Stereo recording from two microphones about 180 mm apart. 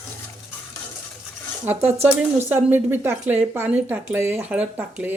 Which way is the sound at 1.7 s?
10° right (ahead or behind).